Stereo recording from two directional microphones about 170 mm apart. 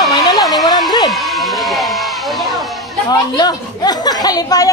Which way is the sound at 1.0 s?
Centre (ahead or behind).